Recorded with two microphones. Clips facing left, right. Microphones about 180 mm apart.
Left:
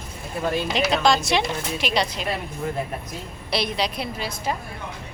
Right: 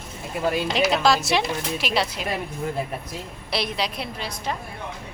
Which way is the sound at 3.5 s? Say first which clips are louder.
Left 2 dB; centre (ahead or behind).